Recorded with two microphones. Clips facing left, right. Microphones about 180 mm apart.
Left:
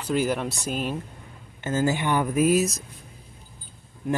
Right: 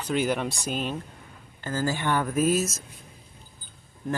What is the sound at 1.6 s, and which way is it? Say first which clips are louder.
Speech: left 4 dB; 20° left (ahead or behind).